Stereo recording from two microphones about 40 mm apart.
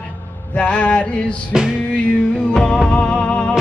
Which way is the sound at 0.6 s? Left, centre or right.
Left.